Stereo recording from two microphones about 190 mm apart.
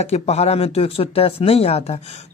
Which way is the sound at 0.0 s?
35° left (ahead or behind).